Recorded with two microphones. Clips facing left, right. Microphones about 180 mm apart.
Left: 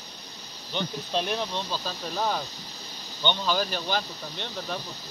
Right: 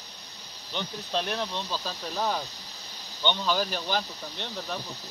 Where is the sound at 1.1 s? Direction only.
5° left (ahead or behind).